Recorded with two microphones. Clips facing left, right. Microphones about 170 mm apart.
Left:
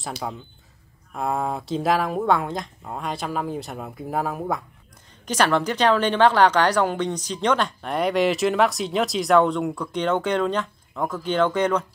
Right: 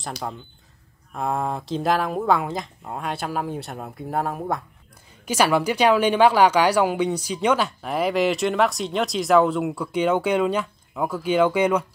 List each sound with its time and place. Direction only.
0.0 s speech: centre (ahead or behind)